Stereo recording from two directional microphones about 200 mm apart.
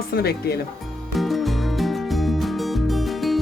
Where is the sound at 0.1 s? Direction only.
50° left (ahead or behind).